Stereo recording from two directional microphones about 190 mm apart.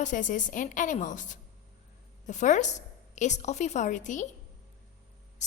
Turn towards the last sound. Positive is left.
turn(degrees=40)  # may be behind; listen again after turning